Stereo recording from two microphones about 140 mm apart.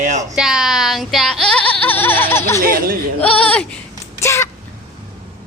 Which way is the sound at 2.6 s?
90° right.